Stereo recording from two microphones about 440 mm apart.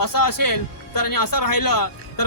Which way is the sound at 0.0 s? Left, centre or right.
Left.